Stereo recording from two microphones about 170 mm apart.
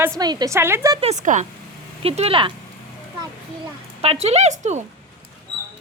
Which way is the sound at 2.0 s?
35° right (ahead or behind).